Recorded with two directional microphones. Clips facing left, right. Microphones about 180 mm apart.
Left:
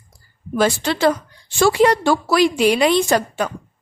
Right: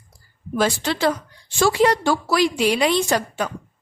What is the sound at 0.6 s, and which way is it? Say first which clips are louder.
Speech: left 3 dB; 60° left (ahead or behind).